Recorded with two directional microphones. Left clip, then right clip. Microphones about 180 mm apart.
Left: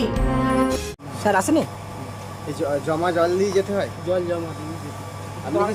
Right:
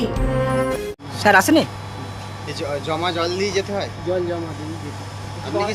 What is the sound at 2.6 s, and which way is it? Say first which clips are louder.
Speech: left 1 dB; 45° left (ahead or behind).